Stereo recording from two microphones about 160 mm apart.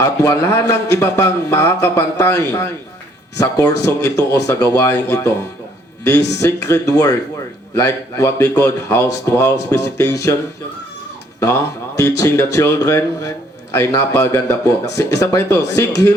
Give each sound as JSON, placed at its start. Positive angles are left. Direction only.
{"t": 0.0, "sound": "speech", "side_deg": 20}
{"t": 11.3, "sound": "speech", "side_deg": 20}